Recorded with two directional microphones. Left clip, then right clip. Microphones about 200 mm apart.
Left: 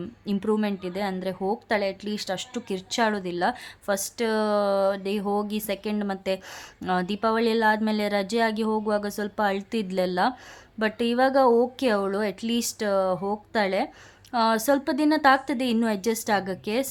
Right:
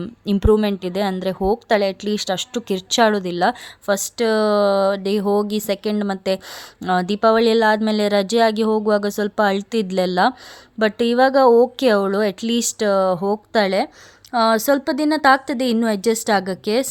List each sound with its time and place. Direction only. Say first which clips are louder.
0.0 s a woman's voice: right 9 dB; 35° right (ahead or behind)